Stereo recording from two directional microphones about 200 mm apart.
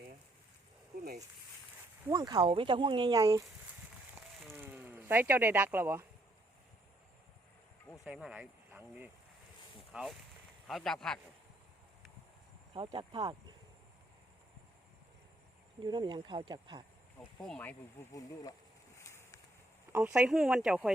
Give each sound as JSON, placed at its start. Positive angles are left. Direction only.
{"t": 2.0, "sound": "speech", "side_deg": -20}
{"t": 4.5, "sound": "speech", "side_deg": -10}
{"t": 8.0, "sound": "speech", "side_deg": -5}
{"t": 12.7, "sound": "speech", "side_deg": -25}
{"t": 15.8, "sound": "speech", "side_deg": -25}
{"t": 17.4, "sound": "speech", "side_deg": 5}
{"t": 18.9, "sound": "vehicle", "side_deg": 15}
{"t": 19.9, "sound": "speech", "side_deg": -5}